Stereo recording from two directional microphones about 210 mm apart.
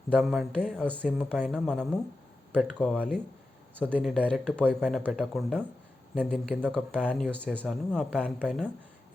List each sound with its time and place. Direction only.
0.1 s speech: centre (ahead or behind)
6.6 s speech: 5° left (ahead or behind)